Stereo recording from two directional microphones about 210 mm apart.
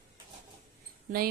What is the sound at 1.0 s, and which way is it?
Speech, 45° right (ahead or behind).